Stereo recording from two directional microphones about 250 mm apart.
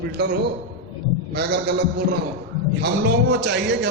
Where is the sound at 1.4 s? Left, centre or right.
Right.